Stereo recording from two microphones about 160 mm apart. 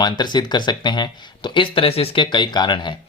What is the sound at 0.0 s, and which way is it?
Speech, 25° left (ahead or behind).